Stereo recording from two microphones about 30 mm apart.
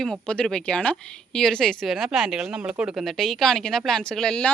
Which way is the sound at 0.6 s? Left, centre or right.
Left.